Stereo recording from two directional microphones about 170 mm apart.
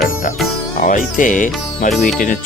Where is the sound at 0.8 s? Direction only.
50° left (ahead or behind).